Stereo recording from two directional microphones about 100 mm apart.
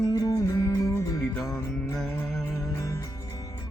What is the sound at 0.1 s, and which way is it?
Music, 35° left (ahead or behind).